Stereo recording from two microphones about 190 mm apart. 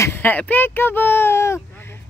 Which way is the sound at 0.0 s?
10° left (ahead or behind).